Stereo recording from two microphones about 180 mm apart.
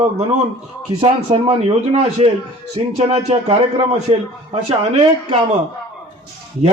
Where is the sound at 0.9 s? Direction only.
35° right (ahead or behind).